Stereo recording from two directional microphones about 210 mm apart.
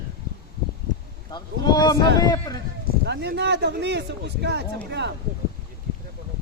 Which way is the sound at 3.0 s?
55° right (ahead or behind).